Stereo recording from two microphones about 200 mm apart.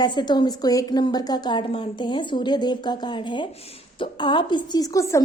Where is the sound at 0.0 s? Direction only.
20° left (ahead or behind).